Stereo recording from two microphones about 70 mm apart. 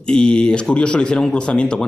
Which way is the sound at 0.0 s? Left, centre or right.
Centre.